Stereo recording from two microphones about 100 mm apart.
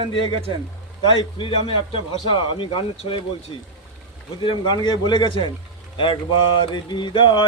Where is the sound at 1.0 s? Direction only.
60° left (ahead or behind).